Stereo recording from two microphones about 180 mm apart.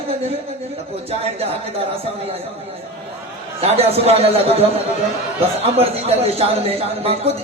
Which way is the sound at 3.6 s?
35° right (ahead or behind).